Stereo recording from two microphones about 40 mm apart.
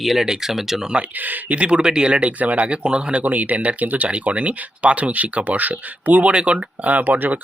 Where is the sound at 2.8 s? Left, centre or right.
Right.